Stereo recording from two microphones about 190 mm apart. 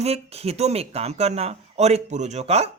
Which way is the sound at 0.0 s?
35° right (ahead or behind).